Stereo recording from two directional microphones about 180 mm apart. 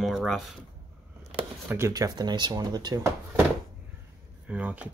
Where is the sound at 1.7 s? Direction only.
15° right (ahead or behind).